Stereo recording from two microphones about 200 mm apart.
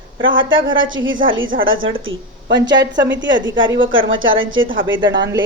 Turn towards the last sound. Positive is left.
turn(degrees=-70)  # may be behind; listen again after turning